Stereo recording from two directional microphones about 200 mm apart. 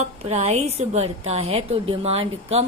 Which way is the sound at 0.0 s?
35° right (ahead or behind).